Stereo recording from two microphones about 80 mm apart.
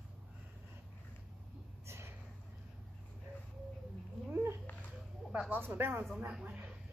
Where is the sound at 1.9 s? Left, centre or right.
Right.